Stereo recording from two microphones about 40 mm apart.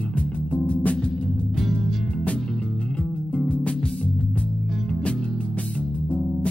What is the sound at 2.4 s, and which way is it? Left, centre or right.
Music, left.